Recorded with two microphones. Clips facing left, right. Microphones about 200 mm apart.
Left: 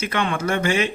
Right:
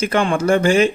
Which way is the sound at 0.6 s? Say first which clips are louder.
Right 6 dB; 45° right (ahead or behind).